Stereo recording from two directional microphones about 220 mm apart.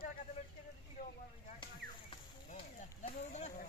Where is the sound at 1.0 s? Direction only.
45° left (ahead or behind).